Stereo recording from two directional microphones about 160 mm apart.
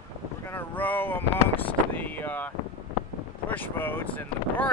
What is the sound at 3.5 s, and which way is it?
Speech, 10° left (ahead or behind).